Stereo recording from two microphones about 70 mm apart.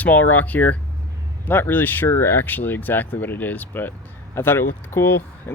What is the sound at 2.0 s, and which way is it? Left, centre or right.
Speech, left.